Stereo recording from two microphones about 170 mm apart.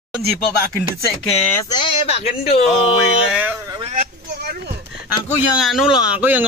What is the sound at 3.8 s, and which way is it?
Speech, 45° right (ahead or behind).